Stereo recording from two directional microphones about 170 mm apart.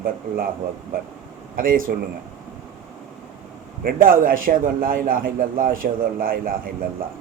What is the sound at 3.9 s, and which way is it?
A man's voice, 55° right (ahead or behind).